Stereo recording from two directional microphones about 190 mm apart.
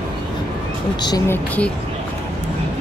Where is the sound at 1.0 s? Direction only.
20° left (ahead or behind).